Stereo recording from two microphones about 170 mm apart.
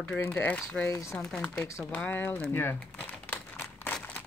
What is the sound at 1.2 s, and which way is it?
Speech, 5° left (ahead or behind).